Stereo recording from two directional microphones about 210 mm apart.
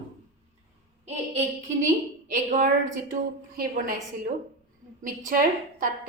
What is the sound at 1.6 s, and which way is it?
A woman's voice, 35° right (ahead or behind).